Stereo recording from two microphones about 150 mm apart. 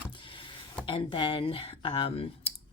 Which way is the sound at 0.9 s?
35° left (ahead or behind).